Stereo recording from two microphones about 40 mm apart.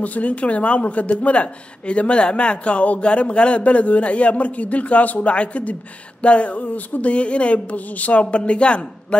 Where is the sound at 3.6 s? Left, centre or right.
Left.